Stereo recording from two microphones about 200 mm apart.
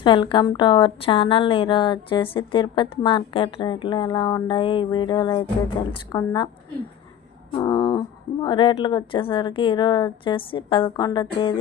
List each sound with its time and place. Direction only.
0.0 s speech: 25° left (ahead or behind)
7.5 s speech: 20° left (ahead or behind)